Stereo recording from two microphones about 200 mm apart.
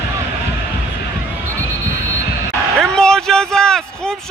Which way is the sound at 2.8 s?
5° left (ahead or behind).